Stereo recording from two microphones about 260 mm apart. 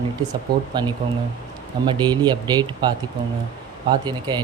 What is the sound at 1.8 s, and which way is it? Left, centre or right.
Speech, centre.